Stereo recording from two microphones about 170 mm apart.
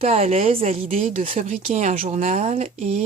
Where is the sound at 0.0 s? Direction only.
40° right (ahead or behind).